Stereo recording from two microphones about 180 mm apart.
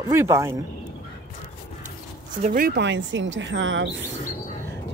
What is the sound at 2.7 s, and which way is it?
Speech, 80° right.